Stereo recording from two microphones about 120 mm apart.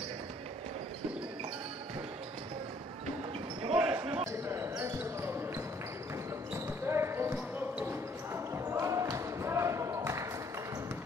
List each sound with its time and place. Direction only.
3.7 s basketball bounce: 15° right (ahead or behind)
6.9 s basketball bounce: 20° right (ahead or behind)